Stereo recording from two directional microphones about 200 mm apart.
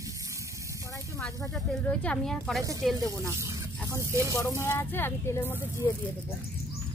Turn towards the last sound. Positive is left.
turn(degrees=10)  # may be behind; listen again after turning